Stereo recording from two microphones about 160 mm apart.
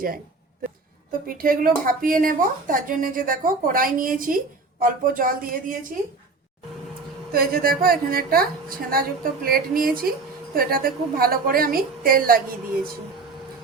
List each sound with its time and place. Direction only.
1.3 s a woman's voice: 60° right (ahead or behind)
7.3 s a woman's voice: 70° right (ahead or behind)